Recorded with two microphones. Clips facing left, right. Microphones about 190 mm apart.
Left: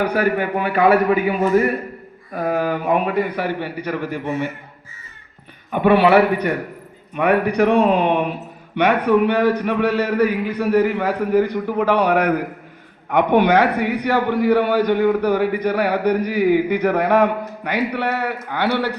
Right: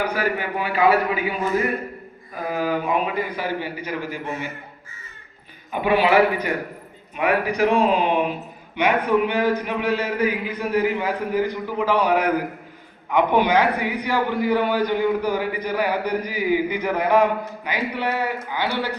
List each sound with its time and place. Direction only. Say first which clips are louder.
0.0 s a man's voice: left 5 dB; 55° left (ahead or behind)
5.7 s a man's voice: left 4 dB; 60° left (ahead or behind)